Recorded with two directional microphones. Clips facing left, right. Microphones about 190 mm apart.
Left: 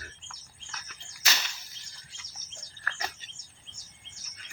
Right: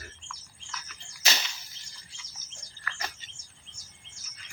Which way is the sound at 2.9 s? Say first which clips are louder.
Even; 50° left (ahead or behind).